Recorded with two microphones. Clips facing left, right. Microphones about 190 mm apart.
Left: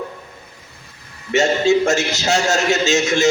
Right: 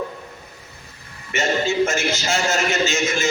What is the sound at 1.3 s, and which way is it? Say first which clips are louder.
A man's voice: left 7 dB; 70° left (ahead or behind).